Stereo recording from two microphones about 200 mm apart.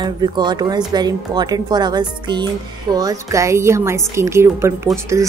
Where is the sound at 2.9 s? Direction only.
20° right (ahead or behind).